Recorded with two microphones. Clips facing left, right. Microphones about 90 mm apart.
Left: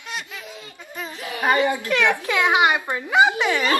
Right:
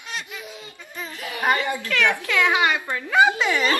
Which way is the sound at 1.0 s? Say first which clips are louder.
Left 1 dB; 20° left (ahead or behind).